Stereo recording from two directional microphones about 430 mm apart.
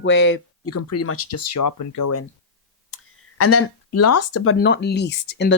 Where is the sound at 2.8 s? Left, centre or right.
Left.